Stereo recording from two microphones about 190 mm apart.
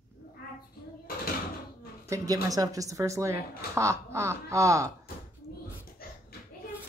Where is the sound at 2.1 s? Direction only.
15° right (ahead or behind).